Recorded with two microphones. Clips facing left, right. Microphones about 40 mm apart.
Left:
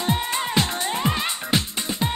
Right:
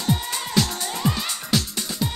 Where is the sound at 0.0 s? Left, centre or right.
Left.